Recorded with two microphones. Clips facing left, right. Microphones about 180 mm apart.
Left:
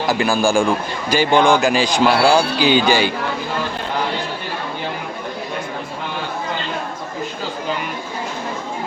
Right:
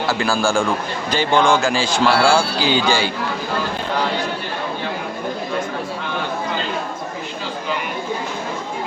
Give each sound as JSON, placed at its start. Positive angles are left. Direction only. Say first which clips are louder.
{"t": 0.1, "sound": "a man's voice", "louder": "left 3 dB", "side_deg": 15}